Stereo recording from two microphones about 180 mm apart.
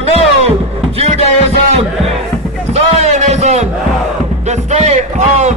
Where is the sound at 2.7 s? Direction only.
40° right (ahead or behind).